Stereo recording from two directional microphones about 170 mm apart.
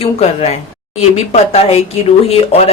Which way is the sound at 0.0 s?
35° left (ahead or behind).